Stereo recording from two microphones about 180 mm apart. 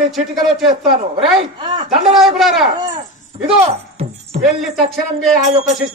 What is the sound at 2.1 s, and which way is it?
Speech, centre (ahead or behind).